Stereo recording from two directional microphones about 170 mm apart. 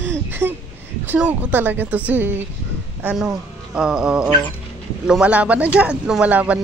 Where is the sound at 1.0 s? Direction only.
10° right (ahead or behind).